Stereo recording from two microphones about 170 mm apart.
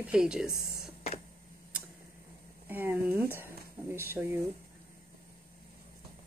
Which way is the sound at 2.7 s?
10° right (ahead or behind).